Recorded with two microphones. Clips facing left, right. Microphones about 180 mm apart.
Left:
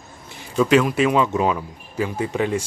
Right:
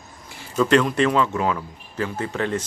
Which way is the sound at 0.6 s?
5° left (ahead or behind).